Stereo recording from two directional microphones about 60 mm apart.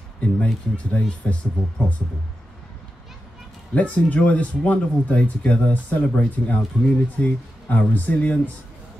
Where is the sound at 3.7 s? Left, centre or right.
Left.